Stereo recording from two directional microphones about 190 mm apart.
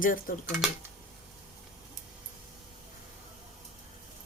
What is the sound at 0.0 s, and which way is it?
Speech, 45° left (ahead or behind).